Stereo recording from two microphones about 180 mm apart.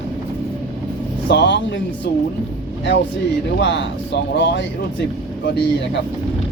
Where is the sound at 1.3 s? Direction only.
75° left (ahead or behind).